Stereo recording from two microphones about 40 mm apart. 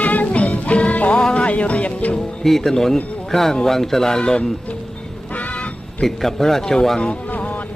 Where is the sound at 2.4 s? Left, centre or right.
Centre.